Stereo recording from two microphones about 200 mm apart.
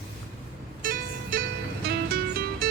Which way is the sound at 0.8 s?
45° right (ahead or behind).